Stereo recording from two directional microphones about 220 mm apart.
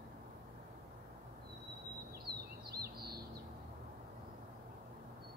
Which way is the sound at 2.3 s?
45° right (ahead or behind).